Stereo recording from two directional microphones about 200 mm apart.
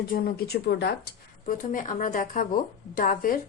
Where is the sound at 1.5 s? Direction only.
40° left (ahead or behind).